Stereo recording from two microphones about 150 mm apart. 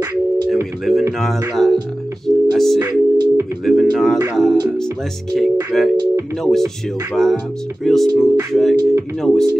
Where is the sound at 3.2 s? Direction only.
25° right (ahead or behind).